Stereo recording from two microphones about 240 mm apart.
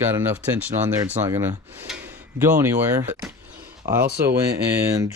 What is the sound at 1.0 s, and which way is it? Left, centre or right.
Speech, centre.